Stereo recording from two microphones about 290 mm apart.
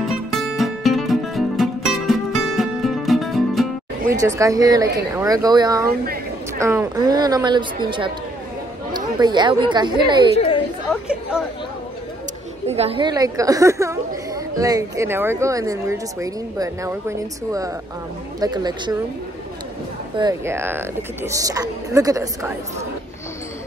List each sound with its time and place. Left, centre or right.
0.0 s music: centre
4.2 s a woman's voice: centre
10.3 s speech: centre
11.1 s chatter: centre
12.6 s a woman's voice: right
20.2 s a woman's voice: centre